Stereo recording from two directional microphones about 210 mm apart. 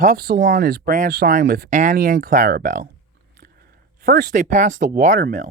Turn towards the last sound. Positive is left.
turn(degrees=-40)  # may be behind; listen again after turning